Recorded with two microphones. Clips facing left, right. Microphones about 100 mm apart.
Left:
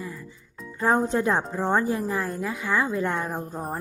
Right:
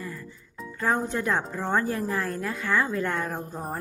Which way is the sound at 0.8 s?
30° left (ahead or behind).